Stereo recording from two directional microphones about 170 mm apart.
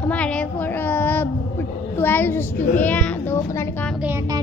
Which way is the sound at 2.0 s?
10° left (ahead or behind).